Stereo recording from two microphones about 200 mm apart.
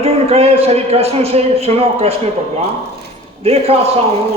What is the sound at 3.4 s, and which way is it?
Speech, 30° right (ahead or behind).